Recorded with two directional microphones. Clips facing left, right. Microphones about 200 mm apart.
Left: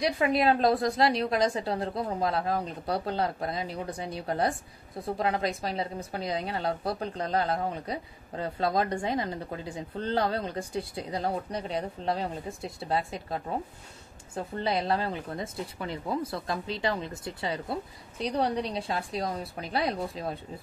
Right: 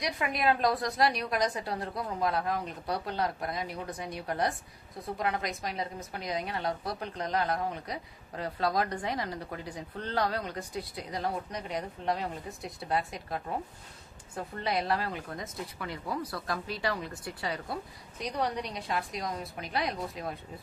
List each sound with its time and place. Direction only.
0.0 s speech: 30° left (ahead or behind)